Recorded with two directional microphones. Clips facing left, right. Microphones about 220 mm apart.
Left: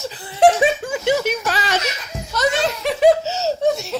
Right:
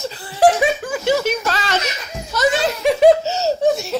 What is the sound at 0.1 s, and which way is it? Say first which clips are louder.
Laughter: left 1 dB; 20° left (ahead or behind).